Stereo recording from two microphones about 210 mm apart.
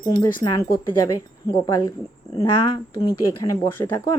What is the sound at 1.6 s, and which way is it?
A woman's voice, 20° left (ahead or behind).